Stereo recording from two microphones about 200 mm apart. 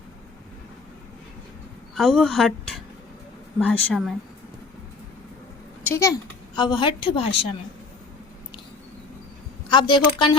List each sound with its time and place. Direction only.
2.0 s speech: centre (ahead or behind)
5.9 s a child's voice: 15° left (ahead or behind)
9.6 s a woman's voice: 25° left (ahead or behind)